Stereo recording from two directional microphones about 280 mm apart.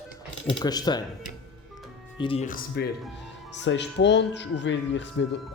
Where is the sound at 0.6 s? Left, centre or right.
Centre.